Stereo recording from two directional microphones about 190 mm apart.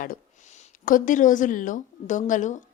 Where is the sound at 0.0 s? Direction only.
45° left (ahead or behind).